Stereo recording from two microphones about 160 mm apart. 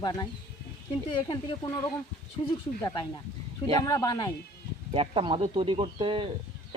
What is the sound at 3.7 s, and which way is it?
Speech, 25° left (ahead or behind).